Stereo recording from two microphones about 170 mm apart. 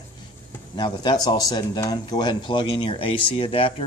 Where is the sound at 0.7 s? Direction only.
25° left (ahead or behind).